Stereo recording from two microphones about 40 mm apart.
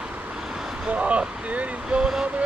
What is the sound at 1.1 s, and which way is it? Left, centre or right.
Speech, right.